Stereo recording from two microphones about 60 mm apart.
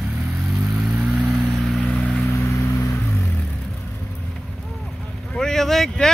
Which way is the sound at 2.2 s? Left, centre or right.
Left.